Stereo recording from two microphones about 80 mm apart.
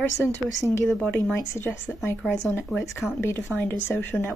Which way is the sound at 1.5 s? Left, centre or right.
Left.